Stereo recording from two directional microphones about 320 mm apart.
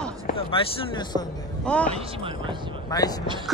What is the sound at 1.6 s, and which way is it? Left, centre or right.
Speech, centre.